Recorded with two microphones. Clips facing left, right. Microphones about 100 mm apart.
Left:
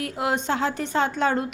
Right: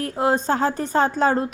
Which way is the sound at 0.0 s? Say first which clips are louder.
Right 5 dB; 35° right (ahead or behind).